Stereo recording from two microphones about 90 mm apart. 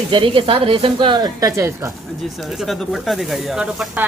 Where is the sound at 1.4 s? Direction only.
35° right (ahead or behind).